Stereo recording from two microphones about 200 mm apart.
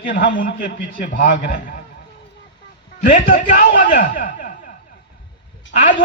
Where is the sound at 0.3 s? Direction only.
40° left (ahead or behind).